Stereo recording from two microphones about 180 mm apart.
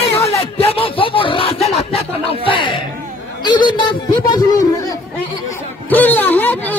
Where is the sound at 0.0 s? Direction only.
35° left (ahead or behind).